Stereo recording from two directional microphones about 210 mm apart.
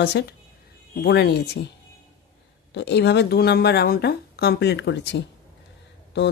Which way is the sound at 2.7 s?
55° left (ahead or behind).